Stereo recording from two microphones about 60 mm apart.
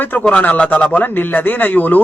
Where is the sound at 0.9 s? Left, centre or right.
Left.